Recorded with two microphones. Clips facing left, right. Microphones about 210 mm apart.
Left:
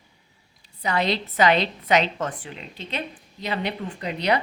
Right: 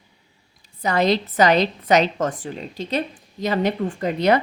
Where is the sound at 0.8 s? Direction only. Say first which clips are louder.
Right 5 dB; 45° right (ahead or behind).